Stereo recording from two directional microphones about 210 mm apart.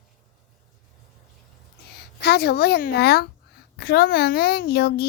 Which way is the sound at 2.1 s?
50° left (ahead or behind).